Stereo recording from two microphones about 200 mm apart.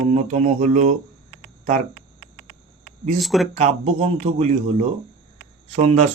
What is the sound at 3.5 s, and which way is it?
Speech, 30° right (ahead or behind).